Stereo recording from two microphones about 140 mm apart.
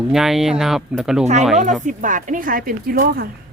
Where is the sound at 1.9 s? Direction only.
65° right (ahead or behind); by 3.2 s 90° right.